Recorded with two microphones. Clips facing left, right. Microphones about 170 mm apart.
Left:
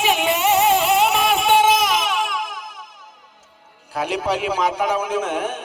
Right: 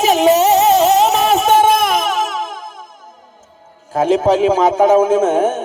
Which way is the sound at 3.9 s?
45° right (ahead or behind).